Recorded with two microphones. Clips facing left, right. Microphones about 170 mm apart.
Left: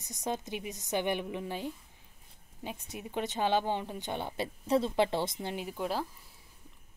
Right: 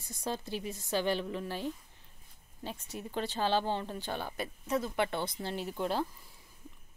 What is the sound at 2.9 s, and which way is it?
Speech, 15° left (ahead or behind).